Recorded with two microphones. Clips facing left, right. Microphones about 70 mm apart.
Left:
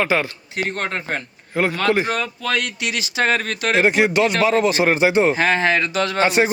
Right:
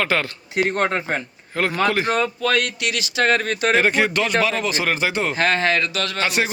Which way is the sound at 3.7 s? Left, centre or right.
Centre.